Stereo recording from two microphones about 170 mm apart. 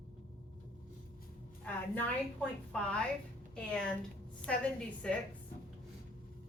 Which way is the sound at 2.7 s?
5° left (ahead or behind).